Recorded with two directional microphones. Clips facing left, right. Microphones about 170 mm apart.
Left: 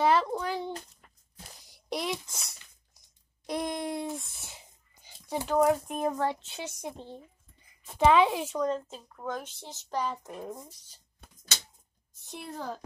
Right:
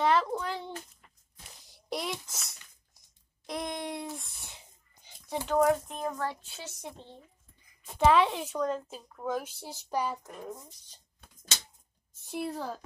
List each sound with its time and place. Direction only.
0.0 s a sound: 5° left (ahead or behind)
1.9 s a woman's voice: centre (ahead or behind)
3.4 s a sound: centre (ahead or behind)
5.9 s speech: 10° left (ahead or behind)
6.1 s a woman's voice: 20° left (ahead or behind)
8.0 s a woman's voice: centre (ahead or behind)
12.3 s a woman's voice: 5° right (ahead or behind)